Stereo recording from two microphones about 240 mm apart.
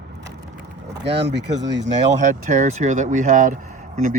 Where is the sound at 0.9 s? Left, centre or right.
Right.